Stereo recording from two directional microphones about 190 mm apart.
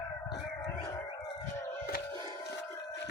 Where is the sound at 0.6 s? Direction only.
20° left (ahead or behind).